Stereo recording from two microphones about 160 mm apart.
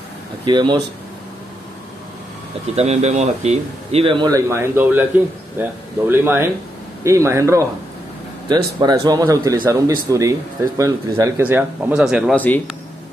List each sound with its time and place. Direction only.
0.5 s speech: 30° right (ahead or behind)
2.7 s speech: 40° right (ahead or behind)
4.3 s speech: 20° right (ahead or behind)
8.8 s speech: 25° right (ahead or behind); by 12.4 s 5° right (ahead or behind)
12.4 s speech: 10° left (ahead or behind)